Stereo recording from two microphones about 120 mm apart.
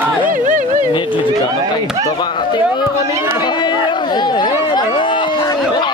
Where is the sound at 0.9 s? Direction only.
45° left (ahead or behind).